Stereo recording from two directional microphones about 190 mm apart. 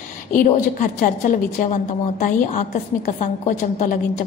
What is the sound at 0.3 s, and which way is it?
A woman's voice, 45° left (ahead or behind).